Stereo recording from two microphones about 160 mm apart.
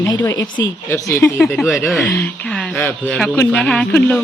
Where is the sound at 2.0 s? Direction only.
15° left (ahead or behind).